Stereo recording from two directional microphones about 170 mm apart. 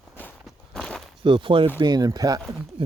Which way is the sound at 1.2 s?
30° right (ahead or behind).